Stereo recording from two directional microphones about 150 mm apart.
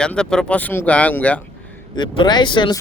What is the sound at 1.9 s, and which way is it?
Speech, 30° left (ahead or behind).